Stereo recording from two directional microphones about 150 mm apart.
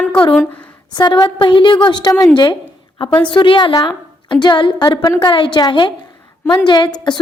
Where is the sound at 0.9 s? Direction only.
25° left (ahead or behind).